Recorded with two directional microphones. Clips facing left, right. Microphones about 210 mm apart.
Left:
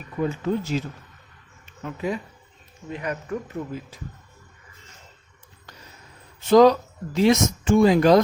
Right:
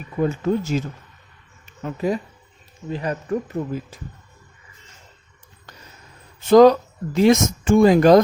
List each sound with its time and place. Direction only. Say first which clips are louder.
0.2 s speech: right 4 dB; 45° right (ahead or behind)
1.8 s speech: right 5 dB; 40° right (ahead or behind)
6.5 s speech: right 3 dB; 50° right (ahead or behind)